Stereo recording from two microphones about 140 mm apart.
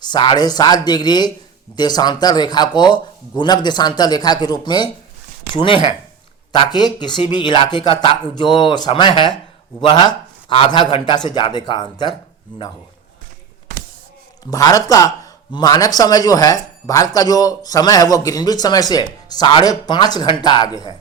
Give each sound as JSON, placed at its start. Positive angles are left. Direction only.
{"t": 0.0, "sound": "a man's voice", "side_deg": 30}
{"t": 14.4, "sound": "a man's voice", "side_deg": 25}